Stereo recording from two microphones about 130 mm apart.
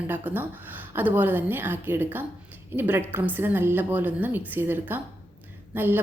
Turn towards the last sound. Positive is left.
turn(degrees=-15)  # may be behind; listen again after turning